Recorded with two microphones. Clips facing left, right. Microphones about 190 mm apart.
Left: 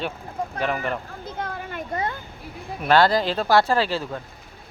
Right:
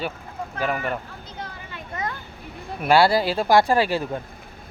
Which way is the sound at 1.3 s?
55° left (ahead or behind).